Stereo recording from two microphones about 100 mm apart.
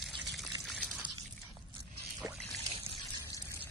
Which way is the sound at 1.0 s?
50° right (ahead or behind).